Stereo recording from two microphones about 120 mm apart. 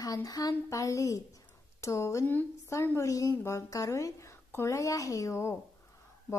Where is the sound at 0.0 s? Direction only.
30° left (ahead or behind).